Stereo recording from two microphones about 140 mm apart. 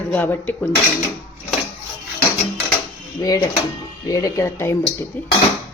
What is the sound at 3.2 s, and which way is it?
Speech, 25° left (ahead or behind).